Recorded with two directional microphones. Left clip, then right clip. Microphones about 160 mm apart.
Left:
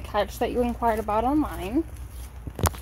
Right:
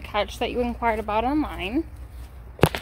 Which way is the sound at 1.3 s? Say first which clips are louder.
Even; 10° right (ahead or behind).